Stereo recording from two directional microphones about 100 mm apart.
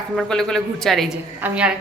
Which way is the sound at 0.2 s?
5° left (ahead or behind).